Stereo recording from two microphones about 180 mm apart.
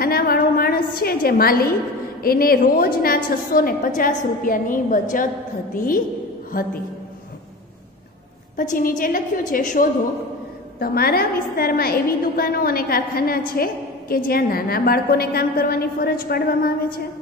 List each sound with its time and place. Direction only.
0.0 s a sound: 55° left (ahead or behind)
2.2 s a woman's voice: 55° left (ahead or behind)
8.5 s a woman's voice: 50° left (ahead or behind)